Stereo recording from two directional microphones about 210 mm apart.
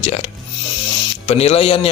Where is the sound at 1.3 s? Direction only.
30° left (ahead or behind).